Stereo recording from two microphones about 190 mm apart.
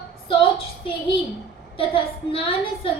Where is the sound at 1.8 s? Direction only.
30° left (ahead or behind).